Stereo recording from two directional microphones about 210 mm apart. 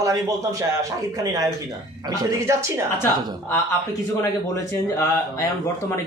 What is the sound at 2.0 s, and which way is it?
Speech, 20° right (ahead or behind).